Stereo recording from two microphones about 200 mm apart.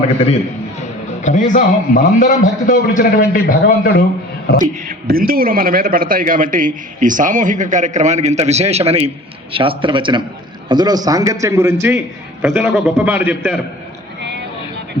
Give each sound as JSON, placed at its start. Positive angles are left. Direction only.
{"t": 1.2, "sound": "a man's voice", "side_deg": 40}
{"t": 4.5, "sound": "a man's voice", "side_deg": -45}
{"t": 14.2, "sound": "vehicle", "side_deg": -60}